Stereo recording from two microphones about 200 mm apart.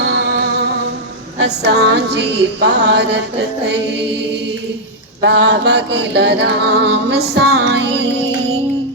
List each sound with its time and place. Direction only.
1.4 s music: 60° right (ahead or behind)